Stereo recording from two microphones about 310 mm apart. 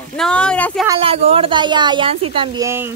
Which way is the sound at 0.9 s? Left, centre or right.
Centre.